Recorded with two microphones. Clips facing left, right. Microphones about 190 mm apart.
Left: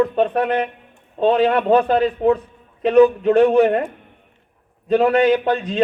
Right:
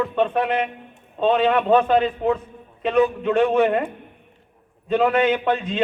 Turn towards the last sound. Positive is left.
turn(degrees=40)  # may be behind; listen again after turning